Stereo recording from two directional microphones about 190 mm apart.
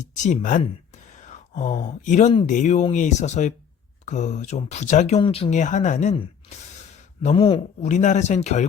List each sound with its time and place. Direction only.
0.0 s speech: 40° left (ahead or behind)
7.2 s speech: 35° left (ahead or behind)